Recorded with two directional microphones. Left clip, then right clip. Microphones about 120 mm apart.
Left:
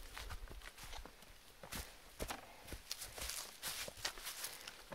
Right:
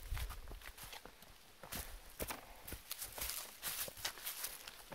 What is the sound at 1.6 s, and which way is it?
Walk, 25° right (ahead or behind).